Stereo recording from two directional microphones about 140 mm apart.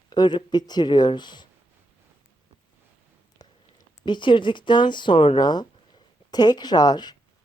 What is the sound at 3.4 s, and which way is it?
Speech, 30° left (ahead or behind).